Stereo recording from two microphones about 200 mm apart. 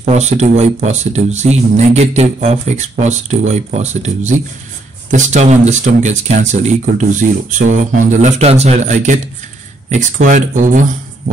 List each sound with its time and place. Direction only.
0.0 s speech: 35° right (ahead or behind)